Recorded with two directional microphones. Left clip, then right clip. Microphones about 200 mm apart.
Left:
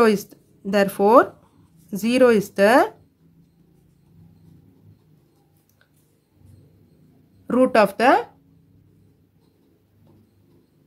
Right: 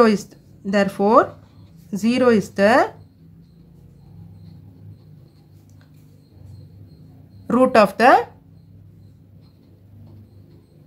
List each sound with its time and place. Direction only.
0.0 s speech: 25° left (ahead or behind)
7.4 s speech: 15° left (ahead or behind)